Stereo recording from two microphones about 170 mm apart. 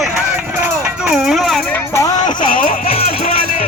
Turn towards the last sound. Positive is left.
turn(degrees=55)  # may be behind; listen again after turning